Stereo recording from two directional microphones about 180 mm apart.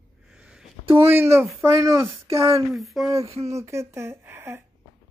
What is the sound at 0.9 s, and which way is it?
Speech, 15° right (ahead or behind).